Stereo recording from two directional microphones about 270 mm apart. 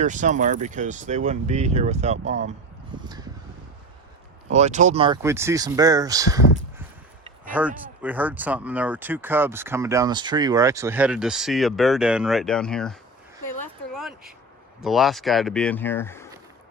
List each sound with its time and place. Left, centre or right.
0.0 s speech: right
4.4 s speech: right
7.5 s speech: centre
13.6 s a sound: centre
14.8 s speech: centre